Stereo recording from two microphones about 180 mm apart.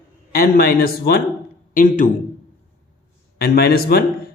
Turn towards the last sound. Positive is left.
turn(degrees=60)  # may be behind; listen again after turning